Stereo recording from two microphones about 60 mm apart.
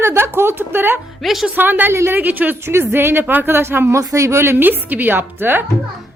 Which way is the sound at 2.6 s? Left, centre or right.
Right.